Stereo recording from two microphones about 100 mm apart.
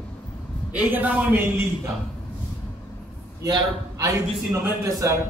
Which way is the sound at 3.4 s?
40° right (ahead or behind).